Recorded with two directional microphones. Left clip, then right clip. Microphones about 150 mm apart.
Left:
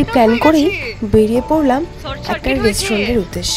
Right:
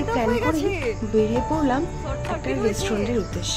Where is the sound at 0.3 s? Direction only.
25° right (ahead or behind).